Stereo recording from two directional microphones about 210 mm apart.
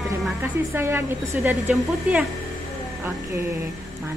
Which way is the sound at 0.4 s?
10° right (ahead or behind).